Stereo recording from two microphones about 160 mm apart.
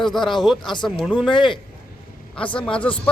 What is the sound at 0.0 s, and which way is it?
Speech, centre (ahead or behind).